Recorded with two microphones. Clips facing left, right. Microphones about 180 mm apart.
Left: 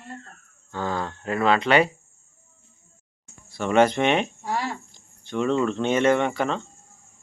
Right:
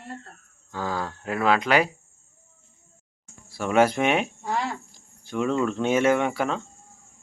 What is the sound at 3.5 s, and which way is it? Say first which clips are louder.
Speech: left 1 dB; 5° right (ahead or behind).